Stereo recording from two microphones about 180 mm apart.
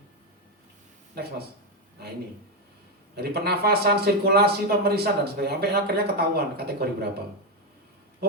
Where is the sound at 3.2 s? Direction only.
60° right (ahead or behind).